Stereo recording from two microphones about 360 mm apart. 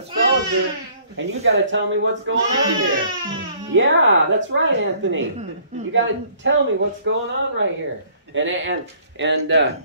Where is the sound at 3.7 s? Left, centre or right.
Right.